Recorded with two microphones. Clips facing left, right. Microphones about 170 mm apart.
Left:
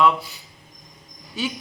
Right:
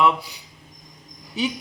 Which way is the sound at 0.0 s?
15° right (ahead or behind).